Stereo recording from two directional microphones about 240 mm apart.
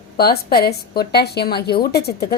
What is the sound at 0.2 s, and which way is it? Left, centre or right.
A woman's voice, left.